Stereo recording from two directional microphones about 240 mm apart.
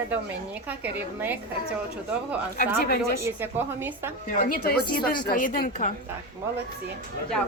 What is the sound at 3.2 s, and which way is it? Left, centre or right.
Speech, centre.